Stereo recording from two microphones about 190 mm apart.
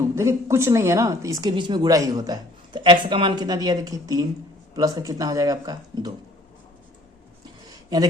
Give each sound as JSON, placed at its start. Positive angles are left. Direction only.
{"t": 0.0, "sound": "a woman's voice", "side_deg": -15}